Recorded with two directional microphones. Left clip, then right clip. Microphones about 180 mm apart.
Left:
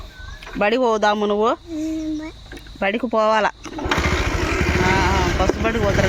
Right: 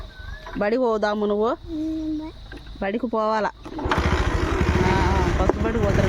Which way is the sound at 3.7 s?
25° left (ahead or behind).